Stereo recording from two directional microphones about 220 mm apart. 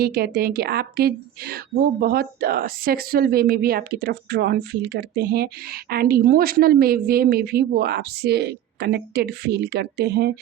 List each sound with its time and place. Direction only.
0.0 s a woman's voice: 45° right (ahead or behind)